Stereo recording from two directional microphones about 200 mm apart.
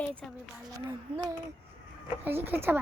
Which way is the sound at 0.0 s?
5° left (ahead or behind).